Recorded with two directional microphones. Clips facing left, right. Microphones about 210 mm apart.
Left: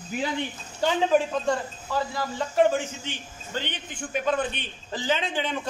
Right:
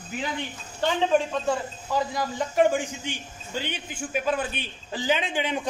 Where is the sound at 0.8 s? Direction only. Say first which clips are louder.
Left 1 dB; centre (ahead or behind).